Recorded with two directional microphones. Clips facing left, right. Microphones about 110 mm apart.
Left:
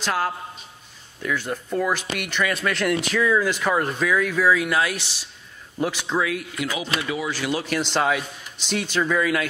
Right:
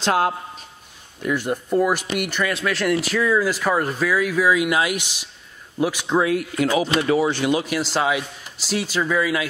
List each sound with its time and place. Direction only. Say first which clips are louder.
0.0 s a man's voice: right 5 dB; 25° right (ahead or behind)
1.2 s speech: right 4 dB; 10° right (ahead or behind)
6.1 s speech: right 8 dB; 35° right (ahead or behind)
7.2 s speech: right 5 dB; 25° right (ahead or behind)
7.6 s a man's voice: right 1 dB; 5° right (ahead or behind)